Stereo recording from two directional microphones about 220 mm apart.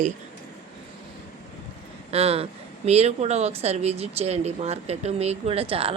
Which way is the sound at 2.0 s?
25° right (ahead or behind).